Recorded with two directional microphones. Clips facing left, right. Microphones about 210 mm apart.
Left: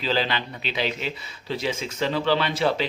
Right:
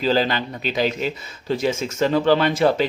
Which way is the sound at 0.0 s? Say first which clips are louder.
Right 5 dB; 45° right (ahead or behind).